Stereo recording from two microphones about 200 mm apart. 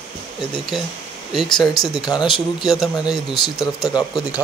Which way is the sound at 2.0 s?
20° left (ahead or behind).